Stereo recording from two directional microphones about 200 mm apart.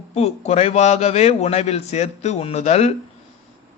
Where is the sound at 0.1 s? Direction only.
30° left (ahead or behind).